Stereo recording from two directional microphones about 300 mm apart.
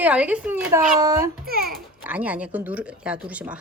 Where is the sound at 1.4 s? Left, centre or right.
Right.